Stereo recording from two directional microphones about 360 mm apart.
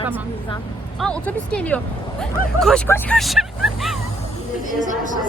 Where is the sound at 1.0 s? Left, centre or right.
Centre.